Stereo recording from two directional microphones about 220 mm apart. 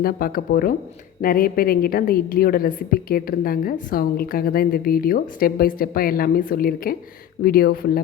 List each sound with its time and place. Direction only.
0.0 s a woman's voice: 40° left (ahead or behind)